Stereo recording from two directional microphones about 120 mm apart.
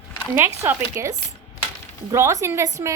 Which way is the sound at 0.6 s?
25° right (ahead or behind).